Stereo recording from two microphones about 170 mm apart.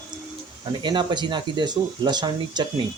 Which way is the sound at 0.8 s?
25° right (ahead or behind).